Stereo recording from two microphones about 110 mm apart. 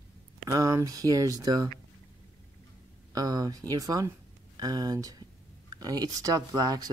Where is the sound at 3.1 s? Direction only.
35° right (ahead or behind).